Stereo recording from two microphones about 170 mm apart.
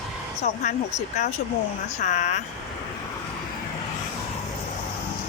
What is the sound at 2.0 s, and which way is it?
Speech, 45° left (ahead or behind).